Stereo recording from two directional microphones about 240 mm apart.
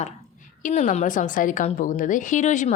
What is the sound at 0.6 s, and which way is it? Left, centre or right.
A woman's voice, left.